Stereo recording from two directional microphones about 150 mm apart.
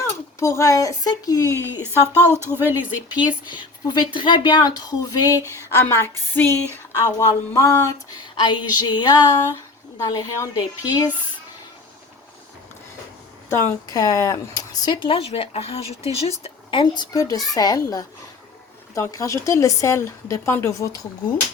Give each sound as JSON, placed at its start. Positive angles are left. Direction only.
{"t": 0.0, "sound": "speech", "side_deg": 20}
{"t": 2.3, "sound": "speech", "side_deg": -15}
{"t": 3.5, "sound": "speech", "side_deg": 30}
{"t": 5.4, "sound": "a sound", "side_deg": 20}
{"t": 7.0, "sound": "speech", "side_deg": 20}
{"t": 13.5, "sound": "speech", "side_deg": 20}
{"t": 16.4, "sound": "speech", "side_deg": 30}